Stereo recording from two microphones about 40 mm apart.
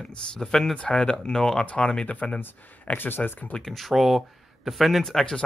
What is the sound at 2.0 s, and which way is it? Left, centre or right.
Speech, left.